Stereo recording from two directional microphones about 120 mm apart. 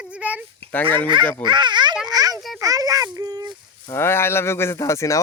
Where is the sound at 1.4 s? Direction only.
40° right (ahead or behind).